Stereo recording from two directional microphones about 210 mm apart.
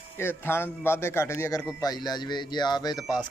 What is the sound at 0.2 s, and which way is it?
A man's voice, 10° left (ahead or behind).